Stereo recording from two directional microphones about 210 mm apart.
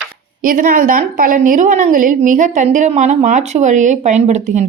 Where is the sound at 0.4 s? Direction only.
40° right (ahead or behind).